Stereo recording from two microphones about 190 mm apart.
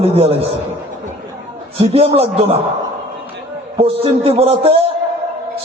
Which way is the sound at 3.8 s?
30° right (ahead or behind).